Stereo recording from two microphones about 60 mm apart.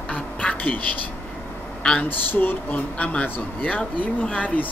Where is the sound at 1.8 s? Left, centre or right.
Centre.